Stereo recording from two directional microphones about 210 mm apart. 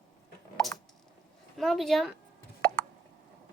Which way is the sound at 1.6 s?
Centre (ahead or behind).